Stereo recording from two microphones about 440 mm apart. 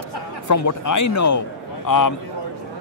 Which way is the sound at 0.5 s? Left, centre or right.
Left.